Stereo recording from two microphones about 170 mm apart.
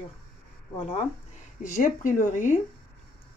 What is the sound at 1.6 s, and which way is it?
Speech, 50° left (ahead or behind).